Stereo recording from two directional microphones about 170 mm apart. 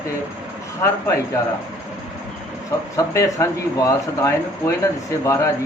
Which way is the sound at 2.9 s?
20° left (ahead or behind).